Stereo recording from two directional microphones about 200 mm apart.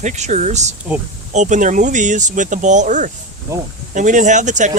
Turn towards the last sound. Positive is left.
turn(degrees=-35)  # may be behind; listen again after turning